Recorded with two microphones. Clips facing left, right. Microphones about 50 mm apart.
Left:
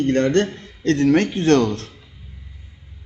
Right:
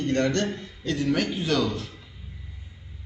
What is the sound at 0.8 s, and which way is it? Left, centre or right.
Speech, left.